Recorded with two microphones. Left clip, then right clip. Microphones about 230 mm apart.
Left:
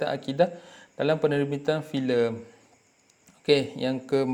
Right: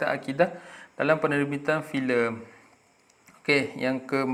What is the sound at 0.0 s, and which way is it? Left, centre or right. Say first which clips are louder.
Speech: even; left.